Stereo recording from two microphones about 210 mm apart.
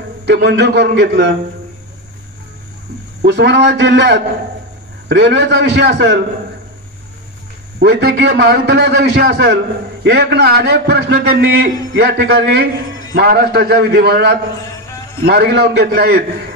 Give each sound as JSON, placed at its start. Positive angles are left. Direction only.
{"t": 0.3, "sound": "a man's voice", "side_deg": -50}
{"t": 3.3, "sound": "a man's voice", "side_deg": -55}
{"t": 7.8, "sound": "a man's voice", "side_deg": -50}